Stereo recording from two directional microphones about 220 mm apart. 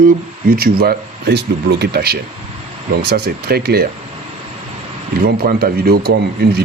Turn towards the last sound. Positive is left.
turn(degrees=-45)  # may be behind; listen again after turning